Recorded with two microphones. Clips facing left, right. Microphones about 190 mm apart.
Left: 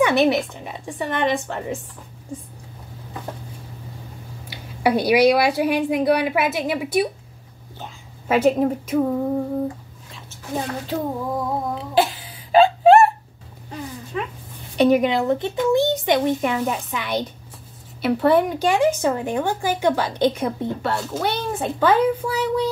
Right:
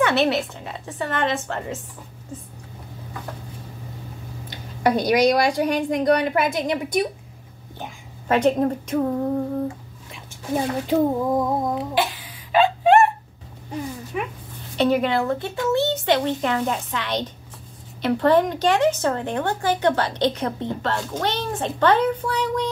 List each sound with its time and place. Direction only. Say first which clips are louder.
0.0 s speech: left 2 dB; 15° left (ahead or behind)
4.5 s speech: left 1 dB; 10° left (ahead or behind)
8.3 s speech: left 1 dB; 5° left (ahead or behind)
10.1 s speech: right 3 dB; 20° right (ahead or behind)
11.9 s a sound: left 4 dB; 30° left (ahead or behind)
14.1 s dog: left 1 dB; 15° right (ahead or behind)
14.8 s speech: left 3 dB; 15° left (ahead or behind)